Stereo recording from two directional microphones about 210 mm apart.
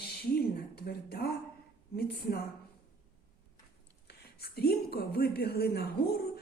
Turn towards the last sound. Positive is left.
turn(degrees=50)  # may be behind; listen again after turning